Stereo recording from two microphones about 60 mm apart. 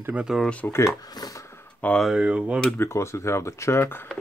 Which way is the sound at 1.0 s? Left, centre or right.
Left.